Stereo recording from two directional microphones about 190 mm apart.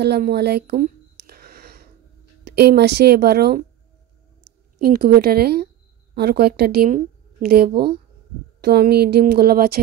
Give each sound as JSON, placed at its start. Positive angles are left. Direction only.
{"t": 0.0, "sound": "a sound", "side_deg": -60}
{"t": 2.4, "sound": "a woman's voice", "side_deg": -60}
{"t": 4.7, "sound": "a woman's voice", "side_deg": -55}